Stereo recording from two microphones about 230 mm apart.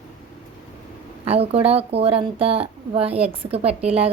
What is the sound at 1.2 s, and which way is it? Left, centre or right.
A woman's voice, right.